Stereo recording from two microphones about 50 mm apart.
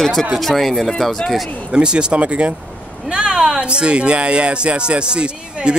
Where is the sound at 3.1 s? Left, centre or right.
Centre.